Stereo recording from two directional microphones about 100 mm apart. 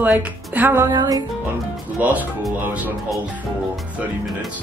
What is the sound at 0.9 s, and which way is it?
Music, 35° right (ahead or behind).